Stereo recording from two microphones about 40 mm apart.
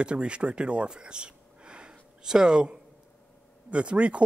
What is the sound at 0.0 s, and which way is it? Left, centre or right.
Speech, right.